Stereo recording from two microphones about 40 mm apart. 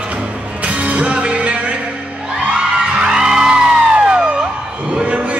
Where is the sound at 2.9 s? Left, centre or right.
Right.